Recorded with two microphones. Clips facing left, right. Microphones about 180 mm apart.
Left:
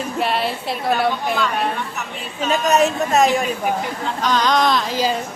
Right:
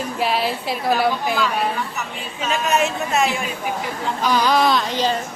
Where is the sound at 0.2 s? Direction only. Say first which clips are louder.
Even; centre (ahead or behind).